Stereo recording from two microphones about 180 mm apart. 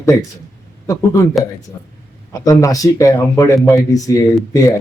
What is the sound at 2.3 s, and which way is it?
A man's voice, 20° left (ahead or behind).